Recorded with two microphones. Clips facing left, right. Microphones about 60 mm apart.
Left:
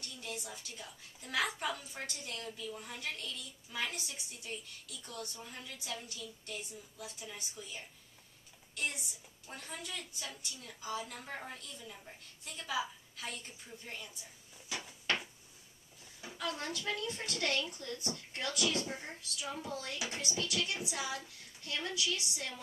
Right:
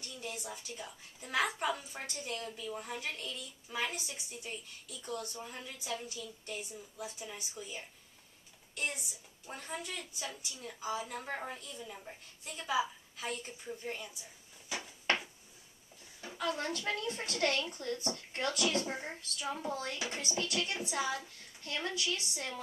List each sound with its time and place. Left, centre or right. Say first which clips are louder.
0.2 s a woman's voice: right 2 dB; centre
9.5 s a woman's voice: right 3 dB; centre
16.2 s a sound: right 4 dB; centre
16.4 s speech: right 3 dB; right
18.9 s speech: right 3 dB; right